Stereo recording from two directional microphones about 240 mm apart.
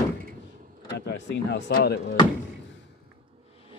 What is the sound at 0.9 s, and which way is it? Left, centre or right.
Speech, left.